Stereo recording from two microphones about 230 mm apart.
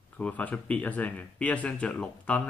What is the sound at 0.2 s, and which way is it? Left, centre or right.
Speech, centre.